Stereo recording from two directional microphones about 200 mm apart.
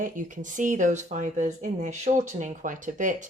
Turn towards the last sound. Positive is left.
turn(degrees=-40)  # may be behind; listen again after turning